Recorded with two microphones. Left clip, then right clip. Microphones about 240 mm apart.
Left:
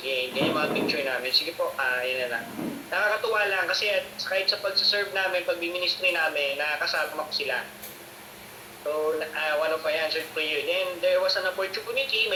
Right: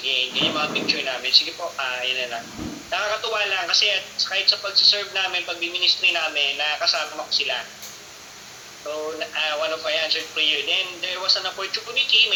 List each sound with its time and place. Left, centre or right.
0.1 s a man's voice: centre
9.1 s a man's voice: centre